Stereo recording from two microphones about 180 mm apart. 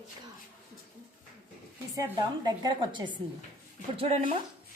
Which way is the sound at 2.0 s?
25° right (ahead or behind).